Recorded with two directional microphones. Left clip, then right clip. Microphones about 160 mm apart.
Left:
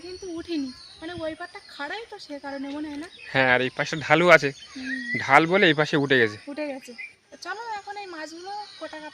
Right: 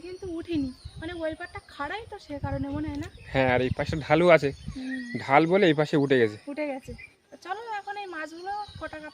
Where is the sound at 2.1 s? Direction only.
Centre (ahead or behind).